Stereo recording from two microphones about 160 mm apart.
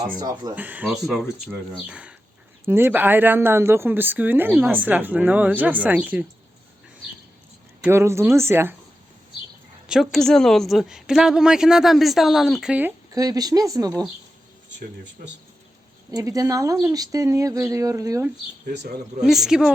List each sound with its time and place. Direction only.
0.2 s speech: 25° right (ahead or behind)
0.5 s speech: 10° right (ahead or behind)
7.8 s speech: 15° right (ahead or behind)
9.9 s speech: centre (ahead or behind)
13.1 s speech: 25° right (ahead or behind)
16.1 s speech: 20° right (ahead or behind)
19.2 s speech: centre (ahead or behind)